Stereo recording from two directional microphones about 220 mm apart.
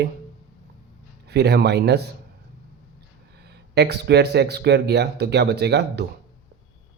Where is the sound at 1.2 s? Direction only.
50° right (ahead or behind).